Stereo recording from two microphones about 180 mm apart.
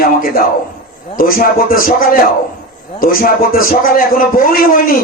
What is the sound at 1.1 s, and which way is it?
Speech, 55° left (ahead or behind).